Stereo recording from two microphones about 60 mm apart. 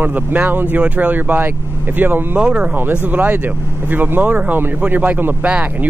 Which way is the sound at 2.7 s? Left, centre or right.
Right.